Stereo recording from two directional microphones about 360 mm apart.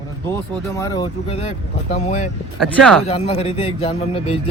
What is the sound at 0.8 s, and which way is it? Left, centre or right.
A man's voice, centre.